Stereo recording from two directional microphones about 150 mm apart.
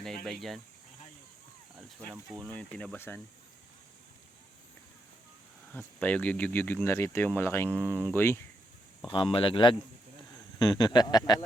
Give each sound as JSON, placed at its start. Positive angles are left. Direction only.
{"t": 0.0, "sound": "speech", "side_deg": 0}
{"t": 2.5, "sound": "speech", "side_deg": 5}
{"t": 5.7, "sound": "speech", "side_deg": 10}
{"t": 7.9, "sound": "speech", "side_deg": -20}
{"t": 8.1, "sound": "speech", "side_deg": 15}
{"t": 9.0, "sound": "speech", "side_deg": 35}